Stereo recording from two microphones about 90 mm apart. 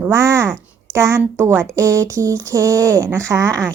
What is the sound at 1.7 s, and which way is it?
Speech, 35° right (ahead or behind).